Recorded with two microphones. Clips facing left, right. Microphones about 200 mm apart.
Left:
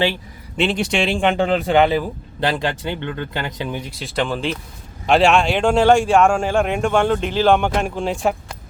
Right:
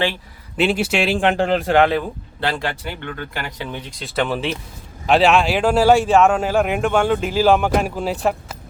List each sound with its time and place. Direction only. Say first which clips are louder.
0.5 s a man's voice: right 1 dB; 5° right (ahead or behind)
2.4 s speech: left 2 dB; 20° left (ahead or behind)
4.0 s a man's voice: right 1 dB; 5° right (ahead or behind)